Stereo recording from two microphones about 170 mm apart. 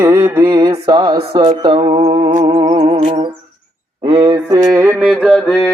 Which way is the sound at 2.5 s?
20° right (ahead or behind).